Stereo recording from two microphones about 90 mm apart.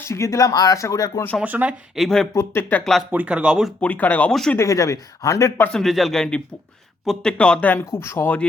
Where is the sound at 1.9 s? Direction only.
5° left (ahead or behind).